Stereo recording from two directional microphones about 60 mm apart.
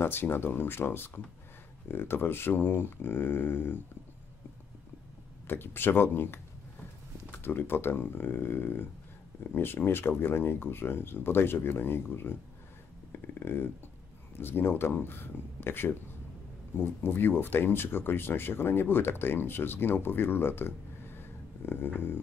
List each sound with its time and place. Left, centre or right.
0.0 s speech: left
5.5 s speech: left
13.1 s a sound: left
14.4 s speech: left